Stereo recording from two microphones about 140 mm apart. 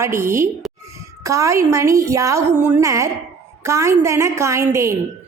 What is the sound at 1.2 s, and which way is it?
A woman's voice, 20° right (ahead or behind).